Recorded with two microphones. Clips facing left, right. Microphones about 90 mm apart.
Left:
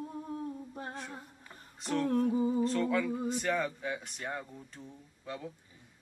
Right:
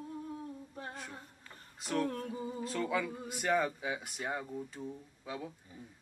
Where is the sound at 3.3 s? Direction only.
10° right (ahead or behind).